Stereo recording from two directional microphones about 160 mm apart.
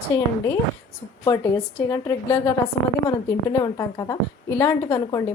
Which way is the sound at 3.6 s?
25° left (ahead or behind).